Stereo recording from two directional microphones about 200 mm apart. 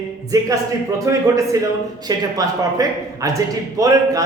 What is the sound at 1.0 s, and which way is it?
A man's voice, 15° right (ahead or behind).